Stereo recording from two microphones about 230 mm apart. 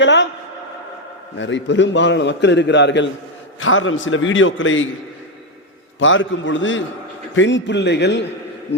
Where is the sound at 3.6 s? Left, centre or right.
Left.